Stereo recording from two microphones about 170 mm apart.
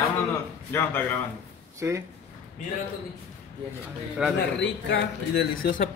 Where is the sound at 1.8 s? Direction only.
15° right (ahead or behind).